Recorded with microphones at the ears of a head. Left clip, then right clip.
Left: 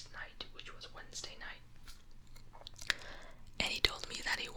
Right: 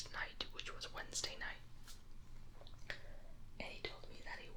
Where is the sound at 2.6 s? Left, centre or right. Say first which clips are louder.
Left 13 dB; left.